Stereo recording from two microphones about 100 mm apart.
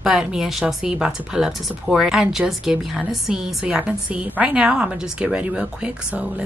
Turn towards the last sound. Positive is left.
turn(degrees=-10)  # may be behind; listen again after turning